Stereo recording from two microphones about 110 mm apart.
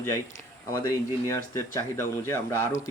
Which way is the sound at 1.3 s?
30° left (ahead or behind).